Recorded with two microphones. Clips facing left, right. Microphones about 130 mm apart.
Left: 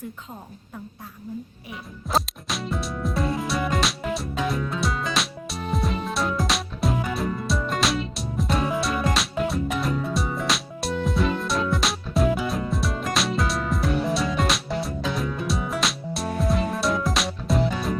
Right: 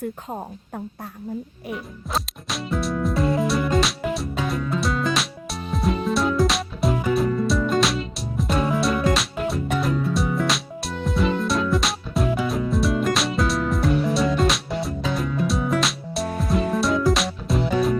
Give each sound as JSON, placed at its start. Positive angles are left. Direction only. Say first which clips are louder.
{"t": 0.3, "sound": "a woman's voice", "louder": "right 8 dB", "side_deg": -50}
{"t": 1.7, "sound": "music", "louder": "left 2 dB", "side_deg": 0}